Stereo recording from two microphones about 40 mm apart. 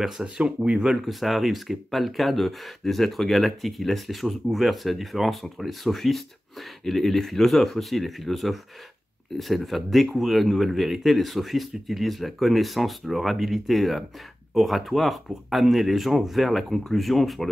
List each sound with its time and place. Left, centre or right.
0.4 s speech: right
0.8 s speech: centre